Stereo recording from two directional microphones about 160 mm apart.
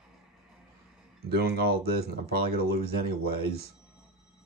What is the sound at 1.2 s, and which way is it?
Speech, 75° right (ahead or behind).